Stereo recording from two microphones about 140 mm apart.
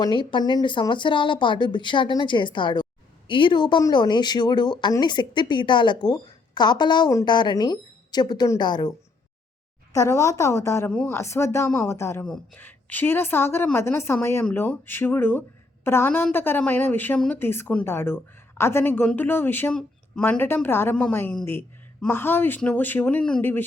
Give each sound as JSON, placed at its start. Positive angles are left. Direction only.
{"t": 0.0, "sound": "speech", "side_deg": 35}
{"t": 12.2, "sound": "speech", "side_deg": 10}